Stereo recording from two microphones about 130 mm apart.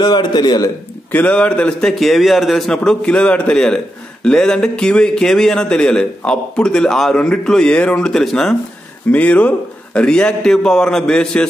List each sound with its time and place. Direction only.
0.0 s a man's voice: 35° left (ahead or behind)
1.1 s a man's voice: 10° left (ahead or behind)